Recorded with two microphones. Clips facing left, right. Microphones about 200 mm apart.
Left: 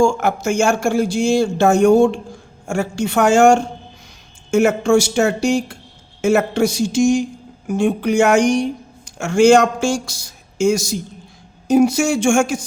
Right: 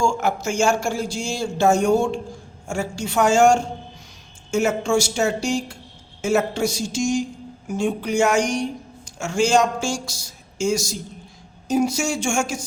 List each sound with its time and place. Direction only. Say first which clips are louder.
0.0 s speech: left 6 dB; 60° left (ahead or behind)